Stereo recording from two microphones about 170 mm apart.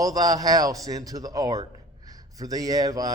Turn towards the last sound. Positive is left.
turn(degrees=-20)  # may be behind; listen again after turning